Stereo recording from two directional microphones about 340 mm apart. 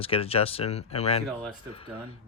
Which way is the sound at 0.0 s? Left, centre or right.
Centre.